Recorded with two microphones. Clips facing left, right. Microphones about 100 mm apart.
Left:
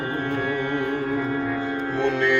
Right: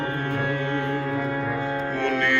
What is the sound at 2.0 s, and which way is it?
Music, 15° left (ahead or behind).